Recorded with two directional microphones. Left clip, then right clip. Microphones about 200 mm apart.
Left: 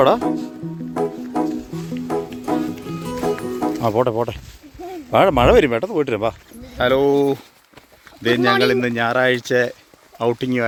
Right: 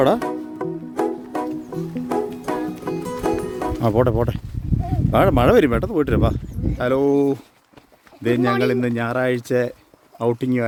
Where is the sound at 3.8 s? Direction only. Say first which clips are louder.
Even; 35° right (ahead or behind).